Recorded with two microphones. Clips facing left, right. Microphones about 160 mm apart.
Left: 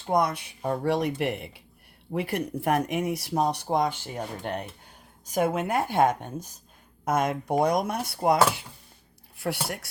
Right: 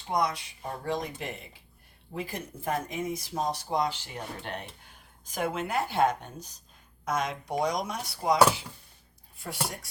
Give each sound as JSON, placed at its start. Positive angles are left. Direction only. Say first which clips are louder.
{"t": 0.0, "sound": "speech", "louder": "left 4 dB", "side_deg": 55}
{"t": 9.4, "sound": "speech", "louder": "left 5 dB", "side_deg": 75}